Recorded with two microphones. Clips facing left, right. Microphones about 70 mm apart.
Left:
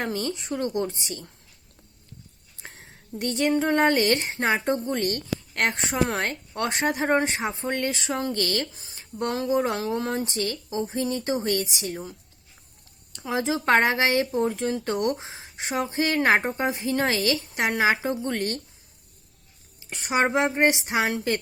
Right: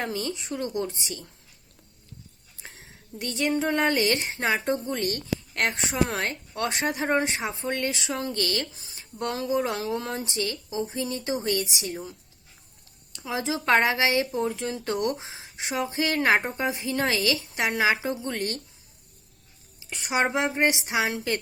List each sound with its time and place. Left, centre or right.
0.0 s a woman's voice: left
2.6 s a sound: left
3.2 s a woman's voice: left
13.1 s a woman's voice: left
19.8 s speech: left